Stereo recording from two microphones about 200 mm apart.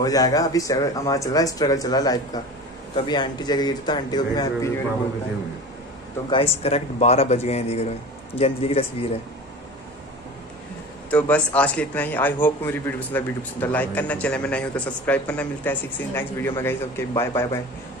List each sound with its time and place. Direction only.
0.0 s a man's voice: 20° left (ahead or behind)
6.3 s a man's voice: 30° left (ahead or behind)
11.1 s a man's voice: 5° left (ahead or behind)